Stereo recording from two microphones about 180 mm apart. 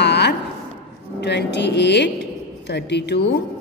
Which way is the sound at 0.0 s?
70° left (ahead or behind).